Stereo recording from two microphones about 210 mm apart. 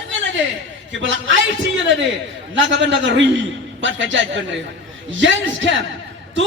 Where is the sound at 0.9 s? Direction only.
65° right (ahead or behind).